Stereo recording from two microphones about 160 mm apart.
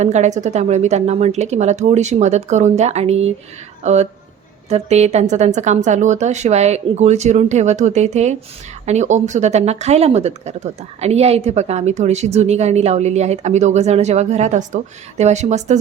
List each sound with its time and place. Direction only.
0.0 s speech: 45° right (ahead or behind)